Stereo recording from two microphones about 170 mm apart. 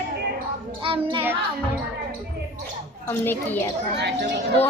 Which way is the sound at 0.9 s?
30° right (ahead or behind).